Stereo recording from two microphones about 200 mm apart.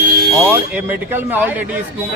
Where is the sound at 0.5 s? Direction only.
10° right (ahead or behind).